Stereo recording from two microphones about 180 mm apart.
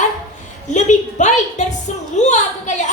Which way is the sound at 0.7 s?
40° left (ahead or behind).